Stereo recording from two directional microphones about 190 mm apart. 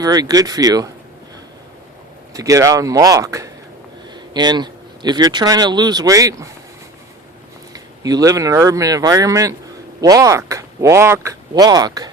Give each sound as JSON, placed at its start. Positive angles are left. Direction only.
{"t": 0.0, "sound": "speech", "side_deg": -20}
{"t": 2.3, "sound": "speech", "side_deg": -15}
{"t": 7.7, "sound": "speech", "side_deg": -20}